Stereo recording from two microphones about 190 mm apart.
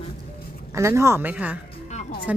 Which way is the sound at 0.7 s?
15° right (ahead or behind).